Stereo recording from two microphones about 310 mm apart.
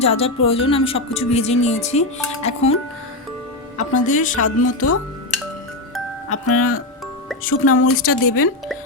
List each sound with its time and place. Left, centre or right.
0.0 s speech: centre
4.0 s speech: left
4.4 s speech: left
6.2 s speech: left